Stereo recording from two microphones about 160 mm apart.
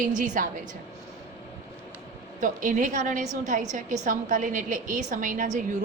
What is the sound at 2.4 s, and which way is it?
A woman's voice, 55° right (ahead or behind).